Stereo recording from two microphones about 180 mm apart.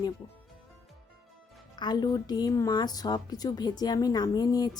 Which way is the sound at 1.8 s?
25° left (ahead or behind).